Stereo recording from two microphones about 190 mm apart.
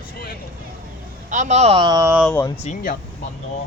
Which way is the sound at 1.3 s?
40° right (ahead or behind).